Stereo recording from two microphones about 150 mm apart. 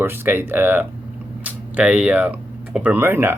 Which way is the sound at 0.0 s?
15° right (ahead or behind).